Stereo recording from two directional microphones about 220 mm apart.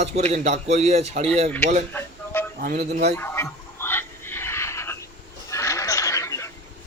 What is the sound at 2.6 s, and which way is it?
Speech, 40° right (ahead or behind).